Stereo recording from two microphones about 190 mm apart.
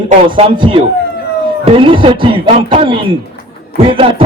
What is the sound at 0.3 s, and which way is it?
Speech, 25° right (ahead or behind).